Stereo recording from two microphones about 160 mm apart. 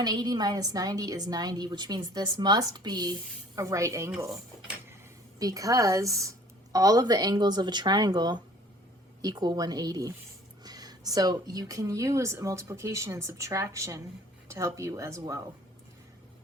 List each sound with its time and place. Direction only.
0.0 s a woman's voice: 25° right (ahead or behind)
5.4 s a woman's voice: 20° right (ahead or behind)